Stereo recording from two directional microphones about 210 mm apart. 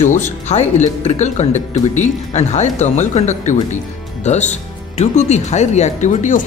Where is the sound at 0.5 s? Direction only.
35° left (ahead or behind).